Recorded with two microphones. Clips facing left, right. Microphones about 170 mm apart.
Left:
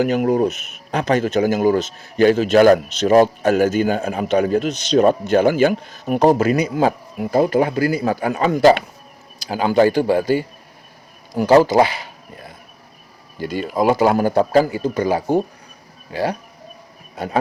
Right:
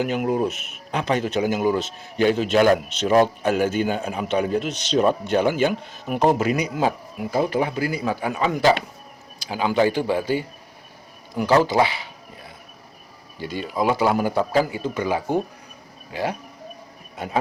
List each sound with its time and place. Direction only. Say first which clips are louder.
0.0 s a man's voice: left 5 dB; 40° left (ahead or behind)
0.5 s speech: even; centre (ahead or behind)
0.9 s a man's voice: left 5 dB; 45° left (ahead or behind)
13.4 s speech: left 5 dB; 45° left (ahead or behind)